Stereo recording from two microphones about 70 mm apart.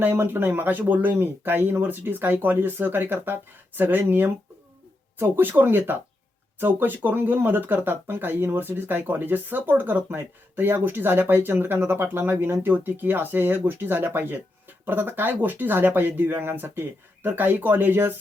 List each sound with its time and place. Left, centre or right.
0.0 s speech: right